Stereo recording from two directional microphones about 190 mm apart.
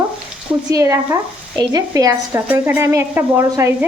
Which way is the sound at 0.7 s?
15° right (ahead or behind).